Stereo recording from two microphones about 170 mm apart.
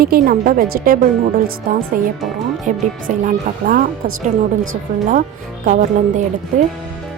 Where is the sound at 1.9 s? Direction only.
55° right (ahead or behind).